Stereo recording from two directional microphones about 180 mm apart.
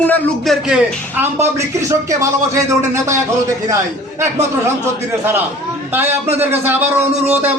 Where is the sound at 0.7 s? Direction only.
10° right (ahead or behind).